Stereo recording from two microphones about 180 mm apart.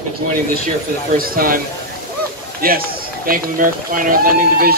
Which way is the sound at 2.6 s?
55° right (ahead or behind).